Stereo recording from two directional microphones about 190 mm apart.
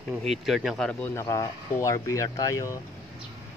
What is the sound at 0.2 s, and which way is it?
Speech, centre (ahead or behind).